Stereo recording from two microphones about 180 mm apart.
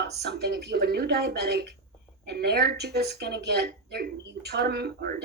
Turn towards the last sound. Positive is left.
turn(degrees=-60)  # may be behind; listen again after turning